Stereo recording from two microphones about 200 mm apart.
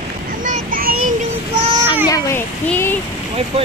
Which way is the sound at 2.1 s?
10° left (ahead or behind).